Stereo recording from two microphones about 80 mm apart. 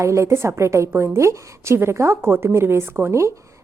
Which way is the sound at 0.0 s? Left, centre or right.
Right.